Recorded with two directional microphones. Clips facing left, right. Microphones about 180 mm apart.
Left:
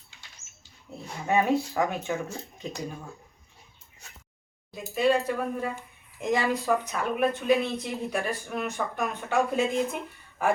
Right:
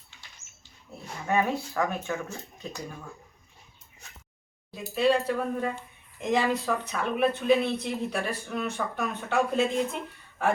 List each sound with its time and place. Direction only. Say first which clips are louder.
0.4 s a sound: left 3 dB; 25° left (ahead or behind)
1.3 s speech: left 3 dB; 15° left (ahead or behind)
4.7 s speech: even; 10° left (ahead or behind)